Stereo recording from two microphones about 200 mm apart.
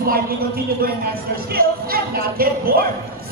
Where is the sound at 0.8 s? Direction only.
50° right (ahead or behind).